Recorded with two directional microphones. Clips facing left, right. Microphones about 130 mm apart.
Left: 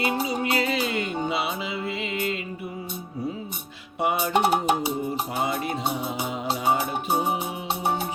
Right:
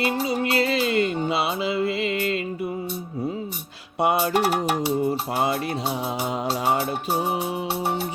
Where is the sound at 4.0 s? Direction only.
80° right.